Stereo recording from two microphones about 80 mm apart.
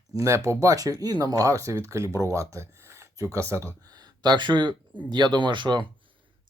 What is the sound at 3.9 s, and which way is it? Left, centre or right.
Speech, right.